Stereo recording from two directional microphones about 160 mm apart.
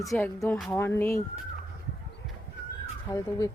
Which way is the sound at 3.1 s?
25° left (ahead or behind).